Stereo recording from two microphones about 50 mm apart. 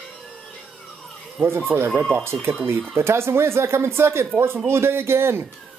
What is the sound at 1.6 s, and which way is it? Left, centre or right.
Speech, right.